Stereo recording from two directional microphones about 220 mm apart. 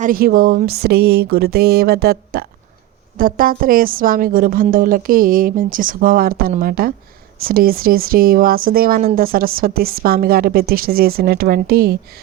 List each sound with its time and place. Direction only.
0.0 s a woman's voice: 40° right (ahead or behind)